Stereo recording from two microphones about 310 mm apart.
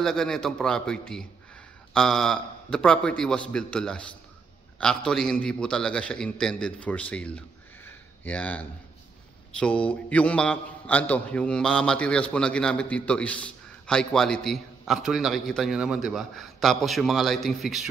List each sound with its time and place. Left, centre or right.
0.0 s a man's voice: centre